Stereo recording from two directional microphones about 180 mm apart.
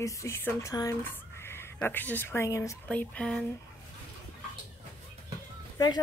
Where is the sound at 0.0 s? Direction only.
15° left (ahead or behind).